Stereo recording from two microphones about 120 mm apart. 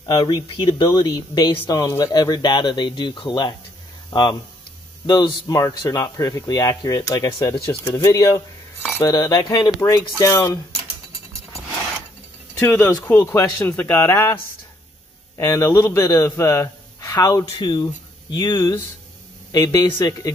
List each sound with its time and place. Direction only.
0.0 s speech: 35° left (ahead or behind)
12.5 s a man's voice: 20° left (ahead or behind)